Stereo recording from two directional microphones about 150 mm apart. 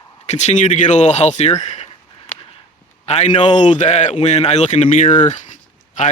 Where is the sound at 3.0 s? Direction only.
45° left (ahead or behind).